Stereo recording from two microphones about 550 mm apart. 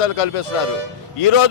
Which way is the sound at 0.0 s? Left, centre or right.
Left.